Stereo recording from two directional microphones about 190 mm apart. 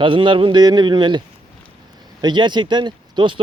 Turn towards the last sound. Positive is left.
turn(degrees=-25)  # may be behind; listen again after turning